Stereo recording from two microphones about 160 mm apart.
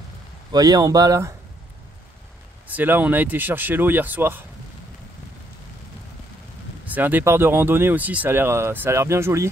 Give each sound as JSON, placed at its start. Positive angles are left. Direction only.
{"t": 0.5, "sound": "speech", "side_deg": -25}
{"t": 2.7, "sound": "speech", "side_deg": -10}
{"t": 6.9, "sound": "speech", "side_deg": -10}